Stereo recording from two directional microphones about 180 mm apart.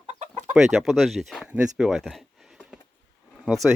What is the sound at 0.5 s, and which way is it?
Speech, centre (ahead or behind).